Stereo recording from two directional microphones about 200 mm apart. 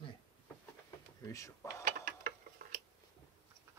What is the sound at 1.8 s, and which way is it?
Gears, 45° right (ahead or behind).